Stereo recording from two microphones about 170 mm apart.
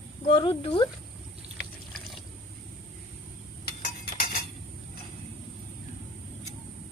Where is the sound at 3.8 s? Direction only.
60° left (ahead or behind).